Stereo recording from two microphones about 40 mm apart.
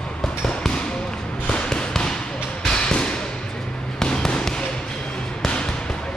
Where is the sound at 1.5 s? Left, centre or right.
Left.